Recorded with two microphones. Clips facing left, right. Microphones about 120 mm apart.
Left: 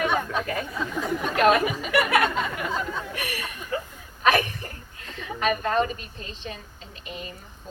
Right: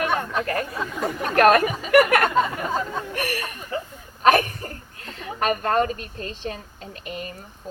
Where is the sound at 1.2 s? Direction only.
60° right (ahead or behind).